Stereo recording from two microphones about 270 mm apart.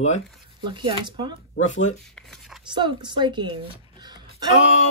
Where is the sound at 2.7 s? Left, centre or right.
Centre.